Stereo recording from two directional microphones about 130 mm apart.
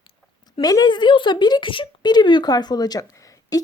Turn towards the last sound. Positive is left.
turn(degrees=25)  # may be behind; listen again after turning